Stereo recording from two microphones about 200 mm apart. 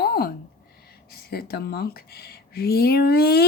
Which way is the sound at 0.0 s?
50° left (ahead or behind).